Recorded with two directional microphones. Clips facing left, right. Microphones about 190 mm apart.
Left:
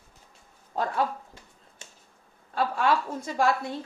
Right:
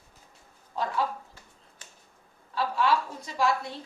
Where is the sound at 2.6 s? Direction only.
50° left (ahead or behind).